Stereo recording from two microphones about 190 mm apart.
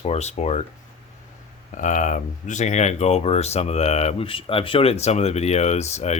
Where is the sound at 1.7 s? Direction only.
40° left (ahead or behind).